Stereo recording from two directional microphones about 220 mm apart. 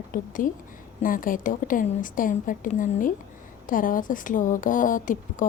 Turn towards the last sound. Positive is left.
turn(degrees=35)  # may be behind; listen again after turning